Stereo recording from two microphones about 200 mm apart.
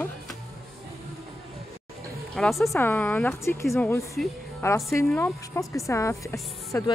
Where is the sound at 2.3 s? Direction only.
Centre (ahead or behind).